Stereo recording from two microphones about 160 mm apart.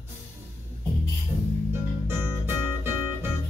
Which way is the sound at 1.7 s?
15° right (ahead or behind).